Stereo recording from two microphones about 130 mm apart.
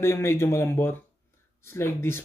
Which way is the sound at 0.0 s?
20° left (ahead or behind).